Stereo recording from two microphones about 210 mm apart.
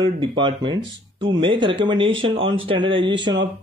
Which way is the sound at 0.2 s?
20° right (ahead or behind).